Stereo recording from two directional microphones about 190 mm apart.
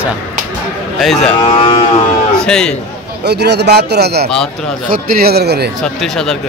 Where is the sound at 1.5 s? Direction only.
30° left (ahead or behind).